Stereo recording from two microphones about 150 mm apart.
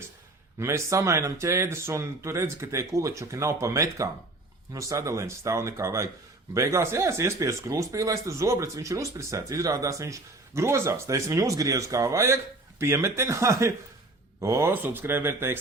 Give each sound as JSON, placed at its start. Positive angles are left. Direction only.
{"t": 0.6, "sound": "speech", "side_deg": -20}